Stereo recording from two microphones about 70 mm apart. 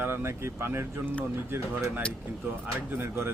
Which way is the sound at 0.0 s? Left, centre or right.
Right.